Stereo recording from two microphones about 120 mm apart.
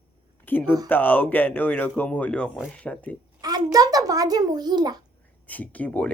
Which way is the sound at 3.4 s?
35° right (ahead or behind).